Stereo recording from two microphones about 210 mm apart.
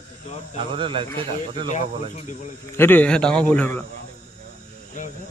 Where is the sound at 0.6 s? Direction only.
25° right (ahead or behind).